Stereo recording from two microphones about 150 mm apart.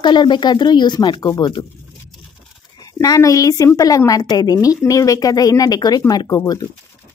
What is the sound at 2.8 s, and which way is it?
Speech, 25° left (ahead or behind).